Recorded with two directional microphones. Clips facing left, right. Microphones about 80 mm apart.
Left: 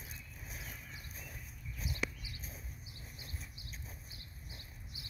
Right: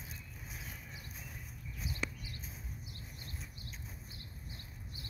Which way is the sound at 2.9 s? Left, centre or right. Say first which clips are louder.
Right 2 dB; right.